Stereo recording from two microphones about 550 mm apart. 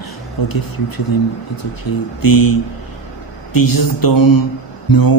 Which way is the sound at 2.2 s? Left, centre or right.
Left.